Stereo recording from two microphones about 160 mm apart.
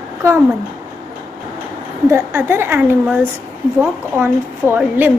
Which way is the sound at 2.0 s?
15° right (ahead or behind).